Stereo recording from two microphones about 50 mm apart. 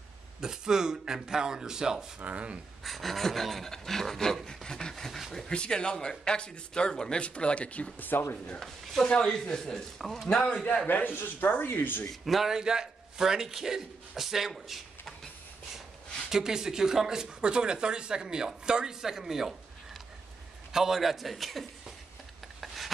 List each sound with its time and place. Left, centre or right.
0.4 s speech: centre
2.1 s speech: right
2.8 s pant: centre
5.5 s a man's voice: centre
8.1 s speech: left
9.0 s a man's voice: centre
10.5 s a man's voice: left
10.9 s speech: left
12.1 s pant: centre
12.5 s a man's voice: centre
16.3 s speech: centre
20.7 s pant: centre